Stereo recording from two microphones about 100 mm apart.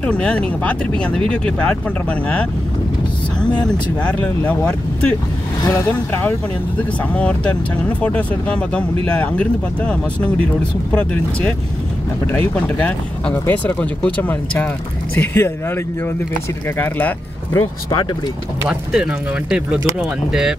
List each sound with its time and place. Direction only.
0.0 s speech: 10° left (ahead or behind)
18.7 s speech: 5° right (ahead or behind)